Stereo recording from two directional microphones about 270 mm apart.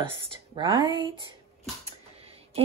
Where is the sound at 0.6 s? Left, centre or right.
Centre.